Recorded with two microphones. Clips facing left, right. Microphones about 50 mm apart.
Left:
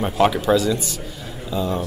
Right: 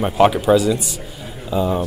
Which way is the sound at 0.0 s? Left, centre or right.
Centre.